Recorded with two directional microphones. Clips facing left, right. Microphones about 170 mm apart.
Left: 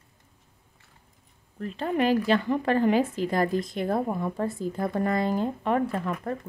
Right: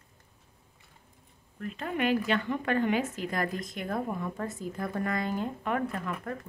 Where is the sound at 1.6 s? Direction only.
35° left (ahead or behind).